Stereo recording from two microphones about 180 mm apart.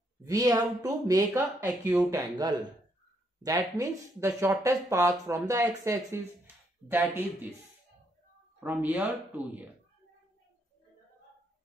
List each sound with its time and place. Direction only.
0.2 s speech: 20° right (ahead or behind)
2.1 s speech: 20° right (ahead or behind)
8.5 s speech: 10° right (ahead or behind)